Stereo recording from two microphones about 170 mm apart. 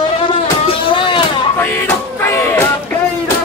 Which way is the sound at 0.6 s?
30° left (ahead or behind).